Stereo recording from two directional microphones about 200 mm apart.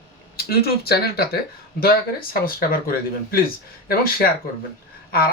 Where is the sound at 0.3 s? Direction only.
50° left (ahead or behind).